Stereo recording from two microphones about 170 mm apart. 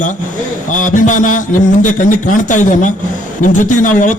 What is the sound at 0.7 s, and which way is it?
A man's voice, 50° left (ahead or behind).